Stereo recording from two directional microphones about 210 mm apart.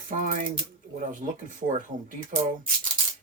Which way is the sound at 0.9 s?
35° right (ahead or behind).